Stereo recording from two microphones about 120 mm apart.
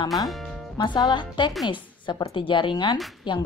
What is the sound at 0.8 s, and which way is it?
A woman's voice, 40° left (ahead or behind).